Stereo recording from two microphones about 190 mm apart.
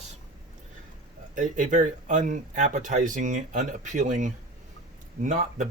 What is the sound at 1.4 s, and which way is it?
Speech, 40° right (ahead or behind).